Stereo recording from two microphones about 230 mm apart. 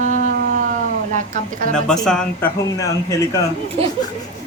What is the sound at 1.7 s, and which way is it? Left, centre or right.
Speech, centre.